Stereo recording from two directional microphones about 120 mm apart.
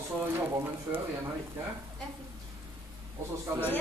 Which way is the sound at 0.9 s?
20° right (ahead or behind).